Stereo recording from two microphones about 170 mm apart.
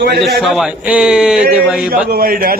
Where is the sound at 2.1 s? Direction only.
60° right (ahead or behind).